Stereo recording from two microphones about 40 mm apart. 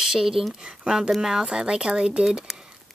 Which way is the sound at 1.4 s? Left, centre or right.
Right.